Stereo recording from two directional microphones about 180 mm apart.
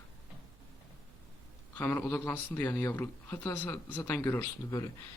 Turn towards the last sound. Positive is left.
turn(degrees=15)  # may be behind; listen again after turning